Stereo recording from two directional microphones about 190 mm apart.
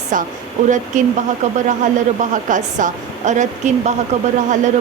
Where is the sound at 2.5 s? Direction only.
40° right (ahead or behind).